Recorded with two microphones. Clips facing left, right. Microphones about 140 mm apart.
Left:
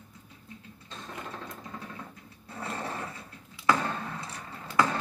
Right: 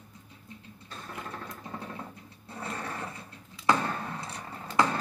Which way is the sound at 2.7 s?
25° left (ahead or behind).